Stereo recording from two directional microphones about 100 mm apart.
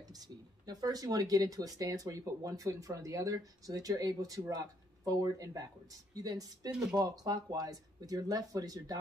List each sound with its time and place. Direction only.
0.1 s speech: 40° right (ahead or behind)